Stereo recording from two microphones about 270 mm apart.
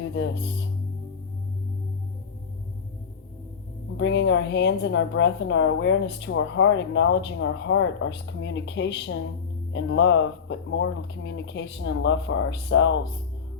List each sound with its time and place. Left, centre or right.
3.9 s a woman's voice: left